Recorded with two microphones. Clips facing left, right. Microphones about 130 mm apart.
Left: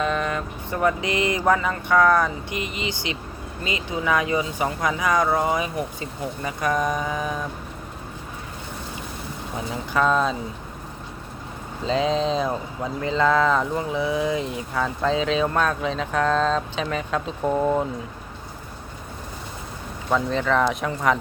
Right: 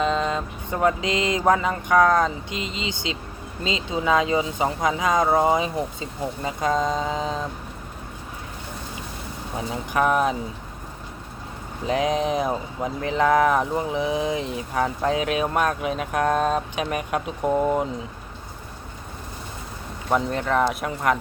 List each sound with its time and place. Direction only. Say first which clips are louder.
0.0 s vehicle: right 1 dB; 20° right (ahead or behind)
1.5 s speech: right 2 dB; 20° right (ahead or behind)
3.6 s speech: right 2 dB; 20° right (ahead or behind)
9.6 s speech: even; 15° right (ahead or behind)
11.9 s speech: even; 15° right (ahead or behind)
20.1 s speech: left 1 dB; 15° right (ahead or behind)